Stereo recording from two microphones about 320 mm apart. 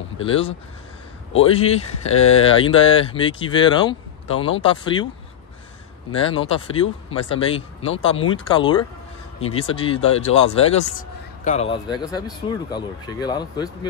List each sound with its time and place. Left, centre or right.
0.2 s speech: centre
6.1 s speech: centre